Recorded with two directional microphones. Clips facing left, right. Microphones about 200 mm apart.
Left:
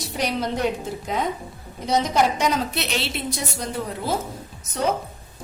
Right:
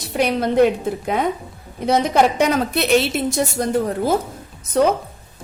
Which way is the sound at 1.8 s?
60° right (ahead or behind).